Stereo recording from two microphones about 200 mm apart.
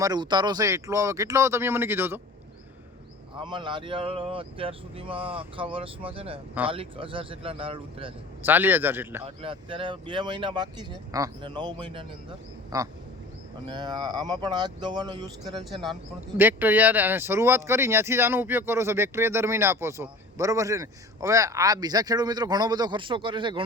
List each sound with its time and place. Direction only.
0.0 s speech: 20° right (ahead or behind)
3.3 s speech: 25° right (ahead or behind)
8.4 s speech: 10° right (ahead or behind)
9.2 s speech: 25° right (ahead or behind)
15.5 s speech: centre (ahead or behind)
16.4 s speech: 10° right (ahead or behind)